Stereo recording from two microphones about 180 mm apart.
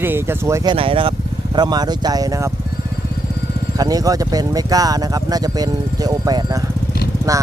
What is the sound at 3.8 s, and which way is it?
Speech, 20° right (ahead or behind).